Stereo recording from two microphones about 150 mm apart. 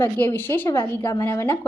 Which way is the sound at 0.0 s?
15° left (ahead or behind).